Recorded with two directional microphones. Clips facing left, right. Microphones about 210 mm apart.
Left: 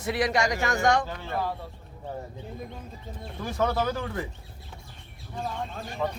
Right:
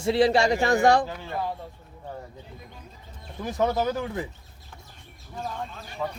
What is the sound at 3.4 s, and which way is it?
Speech, 15° right (ahead or behind).